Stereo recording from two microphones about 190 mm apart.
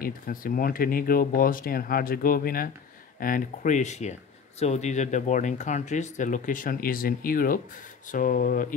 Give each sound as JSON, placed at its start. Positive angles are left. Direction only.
{"t": 0.0, "sound": "speech", "side_deg": 45}